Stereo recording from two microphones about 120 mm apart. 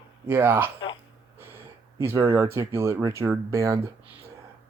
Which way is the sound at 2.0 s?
20° right (ahead or behind).